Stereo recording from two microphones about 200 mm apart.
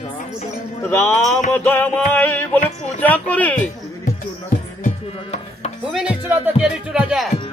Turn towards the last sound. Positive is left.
turn(degrees=-5)  # may be behind; listen again after turning